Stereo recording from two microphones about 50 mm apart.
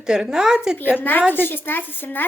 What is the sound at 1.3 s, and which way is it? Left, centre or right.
Speech, left.